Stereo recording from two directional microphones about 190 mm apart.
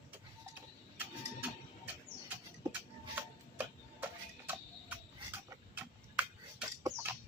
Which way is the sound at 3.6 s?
10° right (ahead or behind).